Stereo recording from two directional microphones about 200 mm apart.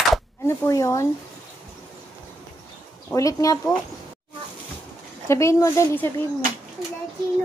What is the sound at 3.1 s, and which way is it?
Speech, 15° left (ahead or behind).